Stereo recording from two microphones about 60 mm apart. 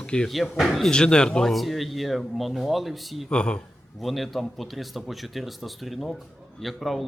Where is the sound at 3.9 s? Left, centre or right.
Centre.